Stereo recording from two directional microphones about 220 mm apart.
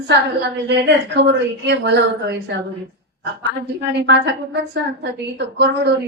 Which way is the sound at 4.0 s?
50° right (ahead or behind).